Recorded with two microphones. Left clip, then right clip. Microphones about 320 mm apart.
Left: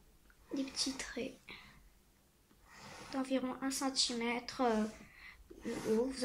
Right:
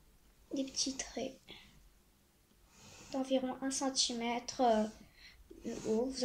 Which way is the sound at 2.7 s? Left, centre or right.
Left.